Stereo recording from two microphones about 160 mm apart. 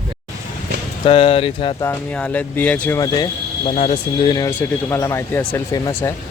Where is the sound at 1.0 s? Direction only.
35° left (ahead or behind).